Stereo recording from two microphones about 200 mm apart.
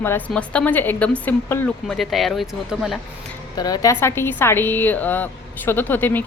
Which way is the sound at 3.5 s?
20° left (ahead or behind).